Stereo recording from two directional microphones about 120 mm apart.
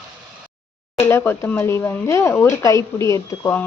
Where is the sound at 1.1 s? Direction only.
15° left (ahead or behind).